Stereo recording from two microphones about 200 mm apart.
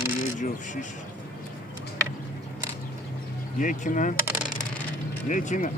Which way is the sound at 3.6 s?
40° left (ahead or behind).